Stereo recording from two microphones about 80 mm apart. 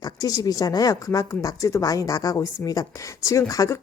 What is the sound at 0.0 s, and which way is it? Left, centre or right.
Speech, left.